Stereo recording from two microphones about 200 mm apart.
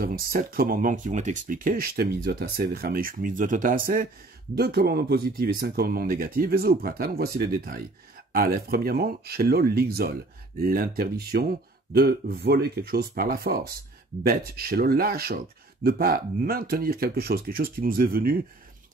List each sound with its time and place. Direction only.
0.0 s speech: 45° right (ahead or behind)